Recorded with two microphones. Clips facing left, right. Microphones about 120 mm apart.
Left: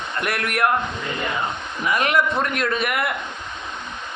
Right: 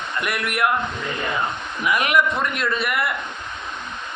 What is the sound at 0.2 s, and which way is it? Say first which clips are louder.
Speech: left 1 dB; 40° left (ahead or behind).